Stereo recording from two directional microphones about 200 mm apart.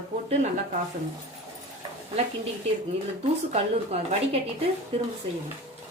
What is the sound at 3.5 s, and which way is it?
Speech, 30° right (ahead or behind).